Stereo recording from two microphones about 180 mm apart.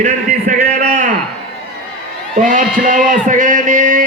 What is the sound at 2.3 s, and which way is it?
A man's voice, 45° right (ahead or behind).